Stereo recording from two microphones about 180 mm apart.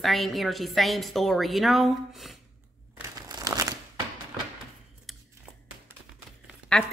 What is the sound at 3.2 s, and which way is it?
Crumpling, 20° right (ahead or behind).